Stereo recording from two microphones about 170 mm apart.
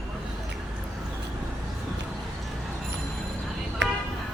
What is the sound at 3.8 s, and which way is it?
Music, 90° right.